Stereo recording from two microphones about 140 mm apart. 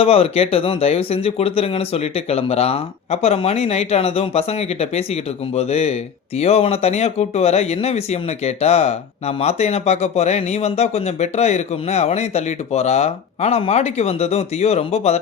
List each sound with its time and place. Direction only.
0.0 s speech: 45° left (ahead or behind)